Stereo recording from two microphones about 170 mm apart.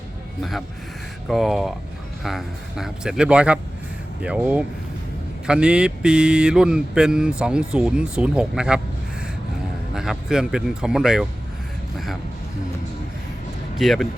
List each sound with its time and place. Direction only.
1.3 s speech: centre (ahead or behind)
9.9 s speech: 5° right (ahead or behind)
13.7 s speech: centre (ahead or behind)